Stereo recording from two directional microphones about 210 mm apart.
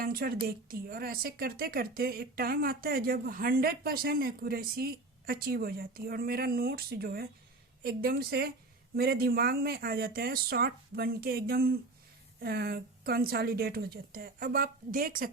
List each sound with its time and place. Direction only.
0.0 s speech: 45° right (ahead or behind)